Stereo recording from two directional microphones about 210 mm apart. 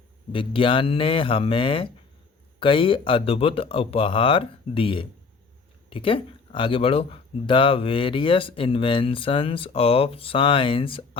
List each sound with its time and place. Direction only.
0.3 s speech: 25° left (ahead or behind)